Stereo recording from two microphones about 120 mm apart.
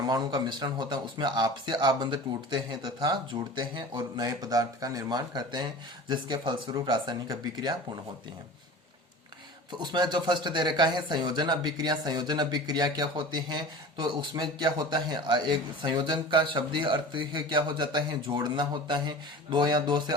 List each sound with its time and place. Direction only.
0.0 s a man's voice: 35° right (ahead or behind)
9.7 s a man's voice: 40° right (ahead or behind)